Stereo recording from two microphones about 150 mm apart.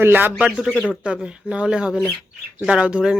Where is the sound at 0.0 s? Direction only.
15° right (ahead or behind).